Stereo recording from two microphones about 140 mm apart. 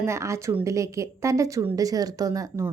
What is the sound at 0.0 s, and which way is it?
A woman's voice, 20° right (ahead or behind).